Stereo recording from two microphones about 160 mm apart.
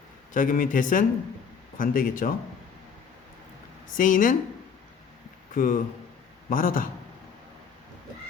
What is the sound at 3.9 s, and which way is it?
Speech, 55° left (ahead or behind).